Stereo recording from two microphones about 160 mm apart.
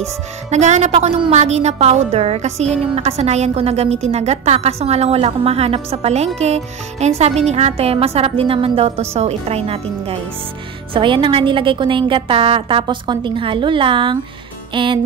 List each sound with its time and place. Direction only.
0.5 s a woman's voice: 45° right (ahead or behind)
14.7 s music: 30° right (ahead or behind)